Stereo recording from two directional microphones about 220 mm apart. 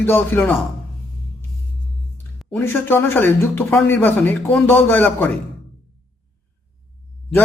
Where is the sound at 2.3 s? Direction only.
10° left (ahead or behind).